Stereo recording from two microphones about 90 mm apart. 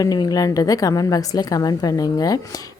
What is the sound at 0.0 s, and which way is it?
A woman's voice, 45° left (ahead or behind).